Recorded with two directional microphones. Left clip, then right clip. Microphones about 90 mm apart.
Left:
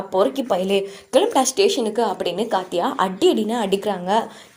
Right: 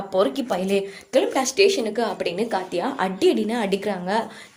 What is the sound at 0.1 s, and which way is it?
Speech, 15° left (ahead or behind).